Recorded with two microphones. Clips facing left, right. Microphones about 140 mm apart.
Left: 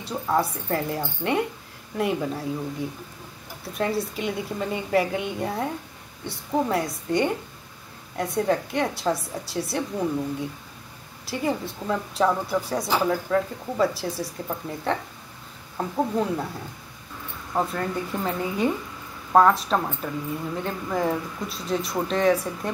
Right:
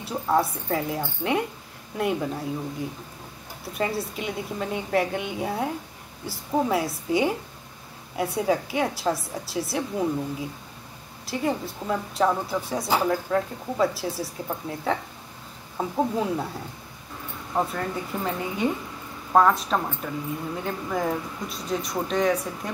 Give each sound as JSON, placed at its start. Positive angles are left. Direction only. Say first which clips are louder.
{"t": 0.0, "sound": "speech", "louder": "right 1 dB", "side_deg": 0}
{"t": 17.6, "sound": "speech", "louder": "left 1 dB", "side_deg": 0}